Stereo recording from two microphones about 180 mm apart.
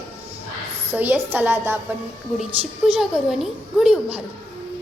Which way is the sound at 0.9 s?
10° right (ahead or behind).